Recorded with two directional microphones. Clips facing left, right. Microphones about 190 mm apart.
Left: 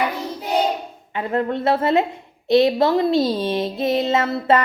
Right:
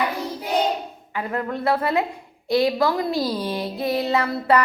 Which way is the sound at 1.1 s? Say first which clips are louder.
Left 5 dB; 25° left (ahead or behind).